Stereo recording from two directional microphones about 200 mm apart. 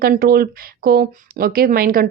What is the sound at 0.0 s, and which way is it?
Speech, 50° right (ahead or behind).